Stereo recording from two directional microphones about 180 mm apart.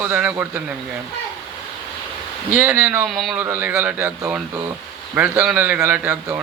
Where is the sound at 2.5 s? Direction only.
10° right (ahead or behind).